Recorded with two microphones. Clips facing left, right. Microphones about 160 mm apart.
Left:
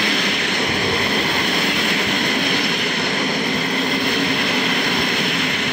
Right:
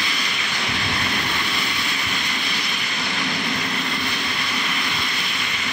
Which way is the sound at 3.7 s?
45° left (ahead or behind).